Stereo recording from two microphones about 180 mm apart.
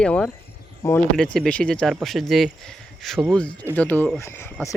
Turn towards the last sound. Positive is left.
turn(degrees=15)  # may be behind; listen again after turning